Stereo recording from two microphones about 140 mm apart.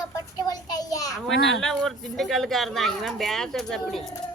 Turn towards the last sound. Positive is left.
turn(degrees=5)  # may be behind; listen again after turning